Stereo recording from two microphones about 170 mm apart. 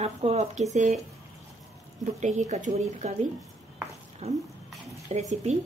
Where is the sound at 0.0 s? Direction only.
40° right (ahead or behind).